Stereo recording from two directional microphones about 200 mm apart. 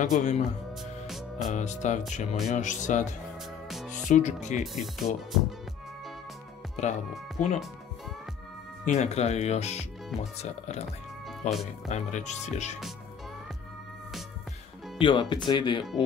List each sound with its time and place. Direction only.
0.0 s speech: 35° left (ahead or behind)
1.0 s music: centre (ahead or behind)
1.5 s speech: 35° left (ahead or behind)
3.6 s music: centre (ahead or behind)
4.1 s speech: 35° left (ahead or behind)
4.7 s speech: centre (ahead or behind)
6.8 s speech: 35° left (ahead or behind)
8.8 s speech: 35° left (ahead or behind)
11.9 s speech: 35° left (ahead or behind)
15.0 s speech: 25° left (ahead or behind)